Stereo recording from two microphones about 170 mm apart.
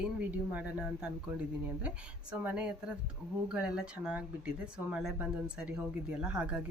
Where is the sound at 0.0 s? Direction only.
10° right (ahead or behind).